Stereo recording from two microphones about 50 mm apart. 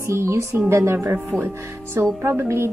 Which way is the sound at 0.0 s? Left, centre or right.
Right.